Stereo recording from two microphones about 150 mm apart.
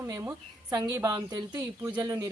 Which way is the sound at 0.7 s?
25° right (ahead or behind).